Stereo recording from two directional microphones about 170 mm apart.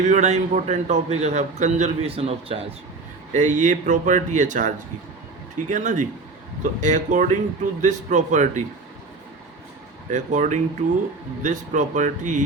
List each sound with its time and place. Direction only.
0.0 s a man's voice: 45° right (ahead or behind)
3.3 s a man's voice: 45° right (ahead or behind)
10.1 s a man's voice: 45° right (ahead or behind)